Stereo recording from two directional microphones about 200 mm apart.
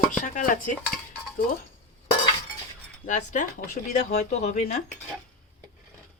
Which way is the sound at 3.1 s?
40° left (ahead or behind).